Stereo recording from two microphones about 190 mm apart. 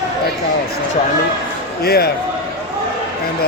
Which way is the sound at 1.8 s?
55° left (ahead or behind).